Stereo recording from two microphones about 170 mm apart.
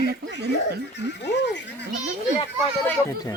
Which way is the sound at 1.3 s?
90° left.